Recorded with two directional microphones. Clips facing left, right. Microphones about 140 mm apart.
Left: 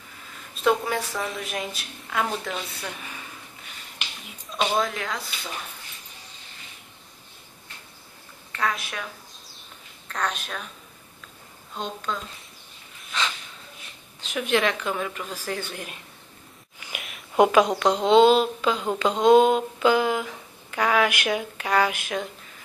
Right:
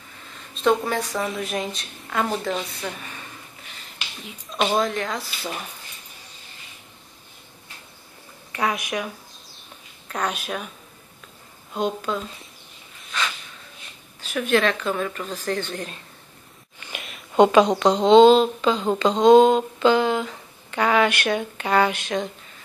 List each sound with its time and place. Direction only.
0.7 s a woman's voice: 5° left (ahead or behind)
4.7 s a woman's voice: centre (ahead or behind)
8.5 s speech: 15° right (ahead or behind)
11.7 s speech: 10° right (ahead or behind)
14.2 s a woman's voice: 15° left (ahead or behind)